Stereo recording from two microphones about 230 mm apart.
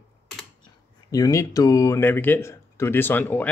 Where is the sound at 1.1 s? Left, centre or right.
Centre.